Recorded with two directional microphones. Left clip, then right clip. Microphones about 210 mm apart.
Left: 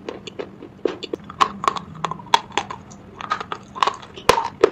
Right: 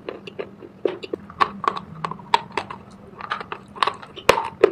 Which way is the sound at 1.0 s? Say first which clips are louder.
Left 4 dB; 10° left (ahead or behind).